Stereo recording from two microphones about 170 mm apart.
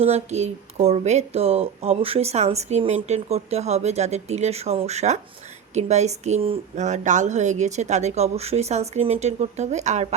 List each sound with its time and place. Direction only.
0.0 s speech: 40° right (ahead or behind)